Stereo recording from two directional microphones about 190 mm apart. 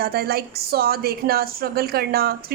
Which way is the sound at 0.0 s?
55° right (ahead or behind).